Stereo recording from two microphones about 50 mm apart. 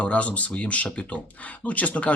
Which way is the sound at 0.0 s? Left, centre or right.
Left.